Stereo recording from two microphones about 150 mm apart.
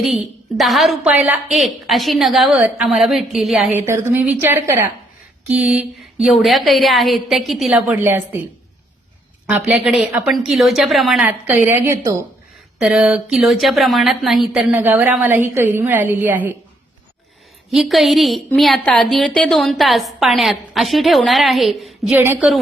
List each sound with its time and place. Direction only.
0.0 s a woman's voice: centre (ahead or behind)
3.7 s a woman's voice: 15° right (ahead or behind)
6.2 s a woman's voice: centre (ahead or behind)
7.9 s a woman's voice: 15° right (ahead or behind)
9.5 s a woman's voice: 10° right (ahead or behind)
12.8 s a woman's voice: 5° right (ahead or behind)
14.7 s a woman's voice: 15° right (ahead or behind)
17.7 s a woman's voice: centre (ahead or behind)
22.1 s a woman's voice: 15° right (ahead or behind)